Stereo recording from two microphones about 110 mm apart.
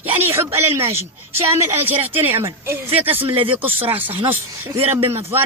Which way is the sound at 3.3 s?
55° right (ahead or behind).